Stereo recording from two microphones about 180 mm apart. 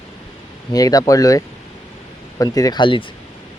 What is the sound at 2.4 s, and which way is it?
Speech, 20° left (ahead or behind).